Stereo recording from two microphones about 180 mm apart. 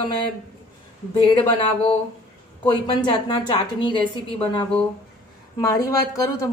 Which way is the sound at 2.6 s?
25° left (ahead or behind).